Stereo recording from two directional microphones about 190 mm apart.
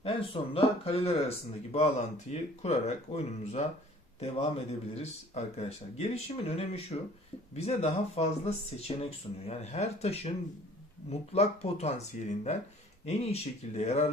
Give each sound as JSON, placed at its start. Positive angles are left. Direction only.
{"t": 0.0, "sound": "speech", "side_deg": 30}